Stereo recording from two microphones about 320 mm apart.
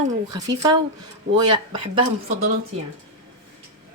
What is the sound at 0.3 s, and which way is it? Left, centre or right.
Speech, centre.